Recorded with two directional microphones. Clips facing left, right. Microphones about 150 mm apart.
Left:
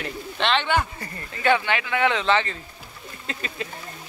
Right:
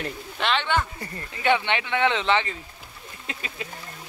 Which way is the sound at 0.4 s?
5° right (ahead or behind).